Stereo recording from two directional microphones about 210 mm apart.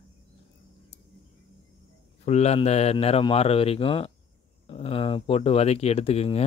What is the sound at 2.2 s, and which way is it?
Speech, 30° left (ahead or behind).